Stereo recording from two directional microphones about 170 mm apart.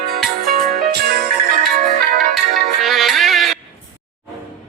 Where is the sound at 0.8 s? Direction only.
65° right (ahead or behind).